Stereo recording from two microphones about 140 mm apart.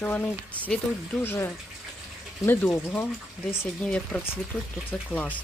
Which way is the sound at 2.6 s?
10° left (ahead or behind).